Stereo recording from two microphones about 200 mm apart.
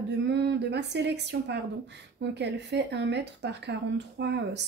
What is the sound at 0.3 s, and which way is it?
Speech, 60° right (ahead or behind).